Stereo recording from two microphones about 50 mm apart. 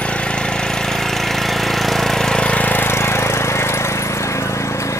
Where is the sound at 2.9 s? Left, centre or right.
Left.